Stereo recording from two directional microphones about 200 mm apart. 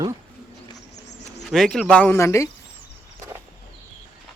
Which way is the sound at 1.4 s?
Centre (ahead or behind).